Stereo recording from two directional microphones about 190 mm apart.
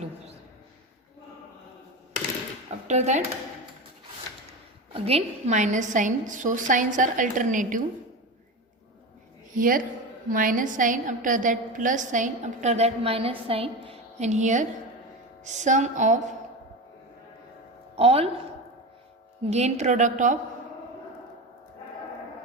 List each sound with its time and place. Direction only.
2.8 s speech: 40° right (ahead or behind)
5.0 s a woman's voice: 35° right (ahead or behind)
9.6 s a woman's voice: 45° right (ahead or behind)
17.9 s a woman's voice: 30° right (ahead or behind)
19.5 s a woman's voice: 35° right (ahead or behind)